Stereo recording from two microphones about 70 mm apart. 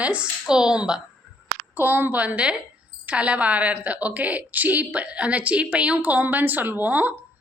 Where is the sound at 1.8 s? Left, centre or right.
Right.